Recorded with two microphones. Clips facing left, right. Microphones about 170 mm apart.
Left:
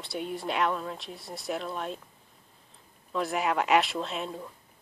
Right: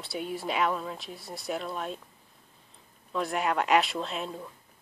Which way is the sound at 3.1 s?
Centre (ahead or behind).